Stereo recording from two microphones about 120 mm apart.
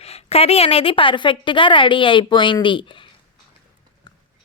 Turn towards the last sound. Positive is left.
turn(degrees=45)  # may be behind; listen again after turning